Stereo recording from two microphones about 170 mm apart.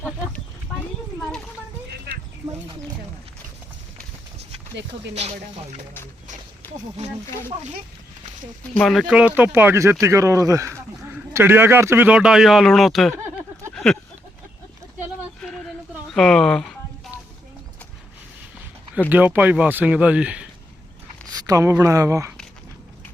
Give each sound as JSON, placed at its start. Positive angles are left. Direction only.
{"t": 0.7, "sound": "a sound", "side_deg": 5}
{"t": 8.8, "sound": "speech", "side_deg": 0}
{"t": 13.7, "sound": "a sound", "side_deg": 5}
{"t": 16.1, "sound": "speech", "side_deg": 5}
{"t": 18.9, "sound": "speech", "side_deg": -10}
{"t": 21.4, "sound": "speech", "side_deg": -20}